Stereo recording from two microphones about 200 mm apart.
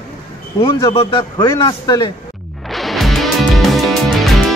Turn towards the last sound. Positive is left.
turn(degrees=0)  # may be behind; listen again after turning